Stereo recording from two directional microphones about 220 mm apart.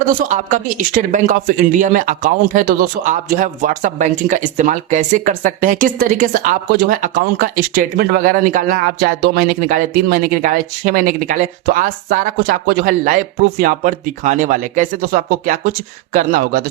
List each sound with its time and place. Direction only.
0.1 s speech: 35° right (ahead or behind)